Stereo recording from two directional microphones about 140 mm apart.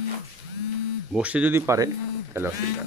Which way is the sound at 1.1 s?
10° right (ahead or behind).